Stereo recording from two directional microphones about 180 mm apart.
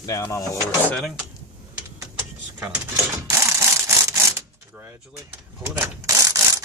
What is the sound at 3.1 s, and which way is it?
Typewriter, 15° right (ahead or behind).